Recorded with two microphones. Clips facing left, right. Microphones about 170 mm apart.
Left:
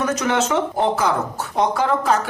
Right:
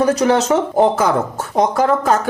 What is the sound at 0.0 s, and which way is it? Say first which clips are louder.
Speech: right 6 dB; 35° right (ahead or behind).